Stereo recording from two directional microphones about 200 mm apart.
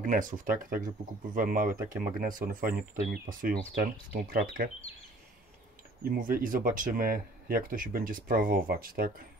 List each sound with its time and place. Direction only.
0.0 s speech: 40° right (ahead or behind)
6.0 s speech: 45° right (ahead or behind)